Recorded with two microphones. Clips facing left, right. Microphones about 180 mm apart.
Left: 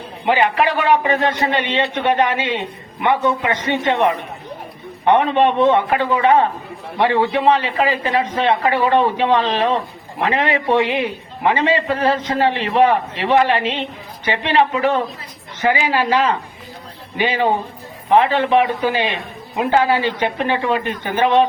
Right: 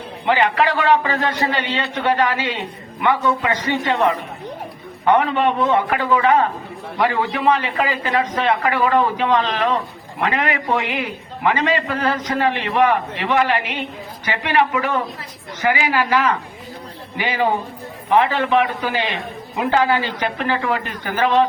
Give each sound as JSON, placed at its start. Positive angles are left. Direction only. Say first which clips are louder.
{"t": 0.3, "sound": "a man's voice", "louder": "left 1 dB", "side_deg": 20}